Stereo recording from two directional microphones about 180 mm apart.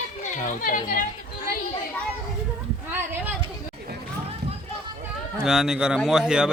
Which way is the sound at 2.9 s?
10° right (ahead or behind).